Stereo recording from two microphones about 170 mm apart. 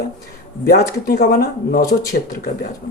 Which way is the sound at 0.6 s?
65° left (ahead or behind).